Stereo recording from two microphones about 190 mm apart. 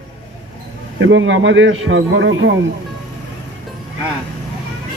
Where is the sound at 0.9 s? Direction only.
85° right.